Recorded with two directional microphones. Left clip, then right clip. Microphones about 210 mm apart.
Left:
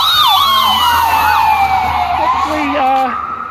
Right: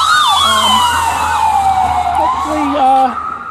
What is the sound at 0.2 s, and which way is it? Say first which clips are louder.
Emergency vehicle: left 1 dB; 25° right (ahead or behind).